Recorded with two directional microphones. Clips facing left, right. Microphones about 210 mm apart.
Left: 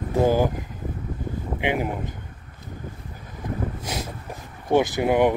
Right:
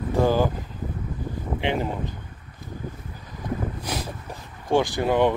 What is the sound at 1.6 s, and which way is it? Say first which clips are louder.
Speech: left 1 dB; 15° left (ahead or behind).